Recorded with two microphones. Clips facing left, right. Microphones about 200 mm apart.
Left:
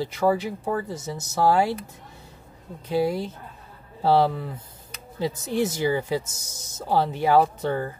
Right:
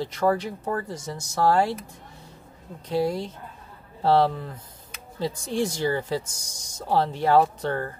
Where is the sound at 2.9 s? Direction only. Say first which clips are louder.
Left 1 dB; 5° left (ahead or behind).